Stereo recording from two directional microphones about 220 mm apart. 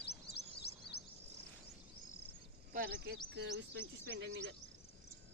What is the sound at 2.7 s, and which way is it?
Speech, 45° right (ahead or behind).